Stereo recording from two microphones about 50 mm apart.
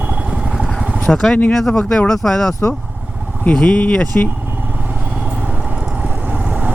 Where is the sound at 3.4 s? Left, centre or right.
Left.